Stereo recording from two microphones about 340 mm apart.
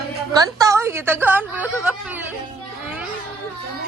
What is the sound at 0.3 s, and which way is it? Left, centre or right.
A woman's voice, centre.